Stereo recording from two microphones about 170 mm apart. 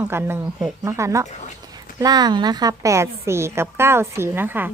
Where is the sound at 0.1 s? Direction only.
15° right (ahead or behind).